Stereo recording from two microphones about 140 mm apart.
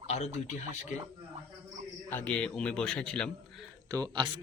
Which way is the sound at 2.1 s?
10° left (ahead or behind).